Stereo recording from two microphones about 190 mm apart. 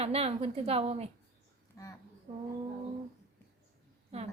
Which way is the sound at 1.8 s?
15° left (ahead or behind).